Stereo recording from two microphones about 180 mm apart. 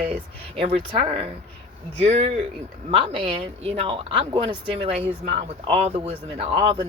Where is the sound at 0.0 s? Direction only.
30° right (ahead or behind).